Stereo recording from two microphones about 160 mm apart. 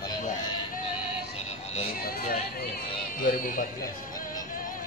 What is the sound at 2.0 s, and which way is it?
Chatter, 65° left (ahead or behind).